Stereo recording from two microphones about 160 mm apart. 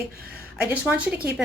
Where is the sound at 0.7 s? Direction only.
10° right (ahead or behind).